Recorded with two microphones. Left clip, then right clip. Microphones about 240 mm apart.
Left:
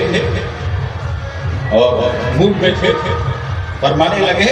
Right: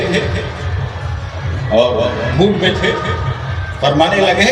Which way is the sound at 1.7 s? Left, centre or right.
Right.